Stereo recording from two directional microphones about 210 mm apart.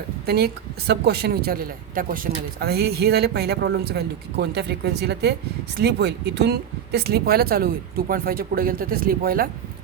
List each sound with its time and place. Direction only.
0.3 s speech: 50° right (ahead or behind)